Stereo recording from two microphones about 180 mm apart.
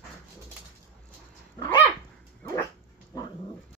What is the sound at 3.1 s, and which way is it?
Cat, 20° left (ahead or behind).